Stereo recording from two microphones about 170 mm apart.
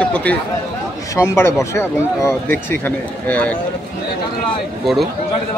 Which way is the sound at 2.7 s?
10° left (ahead or behind).